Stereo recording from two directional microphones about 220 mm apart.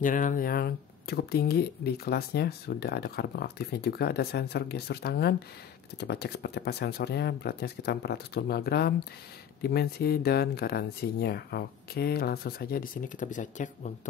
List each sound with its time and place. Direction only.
0.0 s speech: 35° left (ahead or behind)